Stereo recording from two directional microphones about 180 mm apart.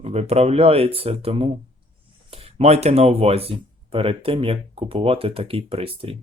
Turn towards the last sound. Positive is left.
turn(degrees=-30)  # may be behind; listen again after turning